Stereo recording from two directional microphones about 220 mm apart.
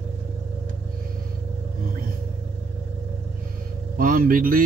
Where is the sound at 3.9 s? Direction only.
40° right (ahead or behind).